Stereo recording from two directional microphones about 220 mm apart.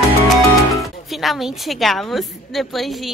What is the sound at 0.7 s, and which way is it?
A woman's voice, centre (ahead or behind).